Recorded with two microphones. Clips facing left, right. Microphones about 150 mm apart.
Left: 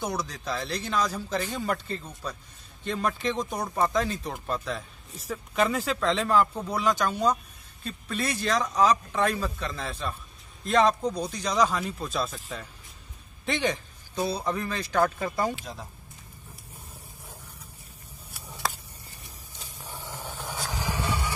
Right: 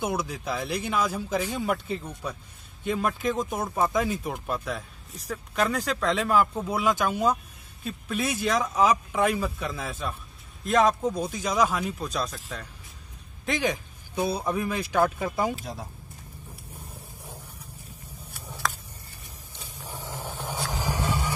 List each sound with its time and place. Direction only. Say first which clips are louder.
0.0 s speech: right 2 dB; 5° right (ahead or behind)
19.9 s vehicle: right 2 dB; 15° right (ahead or behind)